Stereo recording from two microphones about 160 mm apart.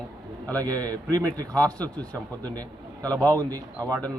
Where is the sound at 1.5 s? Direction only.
10° left (ahead or behind).